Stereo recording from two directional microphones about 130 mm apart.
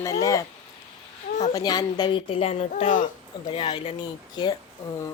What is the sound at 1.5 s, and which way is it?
A woman's voice, 30° left (ahead or behind).